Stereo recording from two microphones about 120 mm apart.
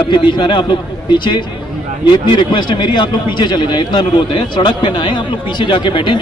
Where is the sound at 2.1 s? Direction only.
45° left (ahead or behind).